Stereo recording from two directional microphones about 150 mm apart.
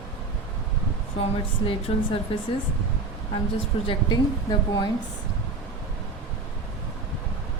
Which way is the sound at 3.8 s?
30° left (ahead or behind).